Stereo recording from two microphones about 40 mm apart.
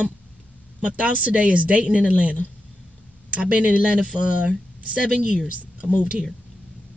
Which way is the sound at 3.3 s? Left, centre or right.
Right.